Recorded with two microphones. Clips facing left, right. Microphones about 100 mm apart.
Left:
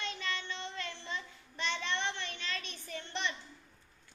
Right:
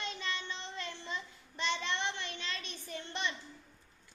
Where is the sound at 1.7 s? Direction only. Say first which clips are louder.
Even; 15° right (ahead or behind).